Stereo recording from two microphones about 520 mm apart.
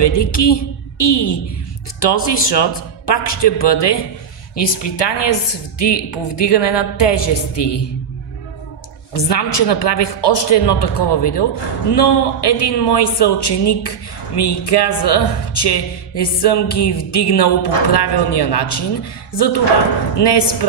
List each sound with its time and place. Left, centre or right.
0.0 s a woman's voice: left
9.1 s speech: left